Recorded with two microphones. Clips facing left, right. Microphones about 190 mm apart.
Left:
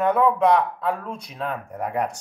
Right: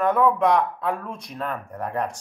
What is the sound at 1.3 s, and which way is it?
Speech, 5° left (ahead or behind).